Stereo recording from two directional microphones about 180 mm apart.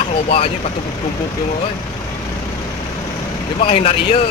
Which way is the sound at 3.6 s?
35° left (ahead or behind).